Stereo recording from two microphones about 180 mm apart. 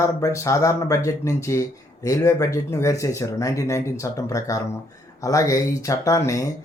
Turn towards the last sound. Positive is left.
turn(degrees=20)  # may be behind; listen again after turning